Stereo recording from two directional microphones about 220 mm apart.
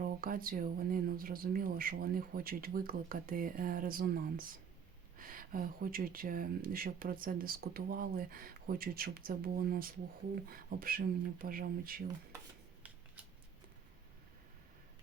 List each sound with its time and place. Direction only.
0.0 s speech: 40° right (ahead or behind)